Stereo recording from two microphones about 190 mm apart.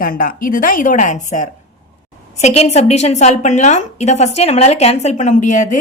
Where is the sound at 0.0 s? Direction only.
45° left (ahead or behind).